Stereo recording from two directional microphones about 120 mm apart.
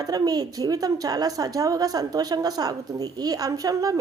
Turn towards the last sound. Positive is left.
turn(degrees=-30)  # may be behind; listen again after turning